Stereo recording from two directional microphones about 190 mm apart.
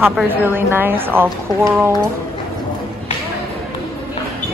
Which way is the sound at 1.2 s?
Centre (ahead or behind).